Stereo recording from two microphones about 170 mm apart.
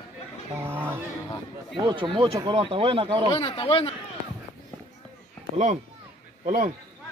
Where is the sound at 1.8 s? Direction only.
30° right (ahead or behind).